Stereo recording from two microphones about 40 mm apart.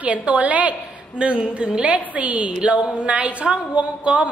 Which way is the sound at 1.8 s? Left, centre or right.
Right.